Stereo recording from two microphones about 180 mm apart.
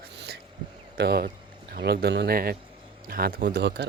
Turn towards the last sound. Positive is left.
turn(degrees=-70)  # may be behind; listen again after turning